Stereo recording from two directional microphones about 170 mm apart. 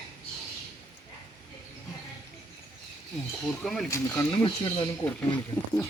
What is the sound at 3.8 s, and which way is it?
Speech, 15° left (ahead or behind).